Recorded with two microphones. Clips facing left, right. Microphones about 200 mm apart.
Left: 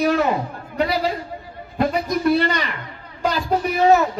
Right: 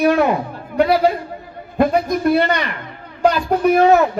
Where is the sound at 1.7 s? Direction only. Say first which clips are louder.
Right 5 dB; 50° right (ahead or behind).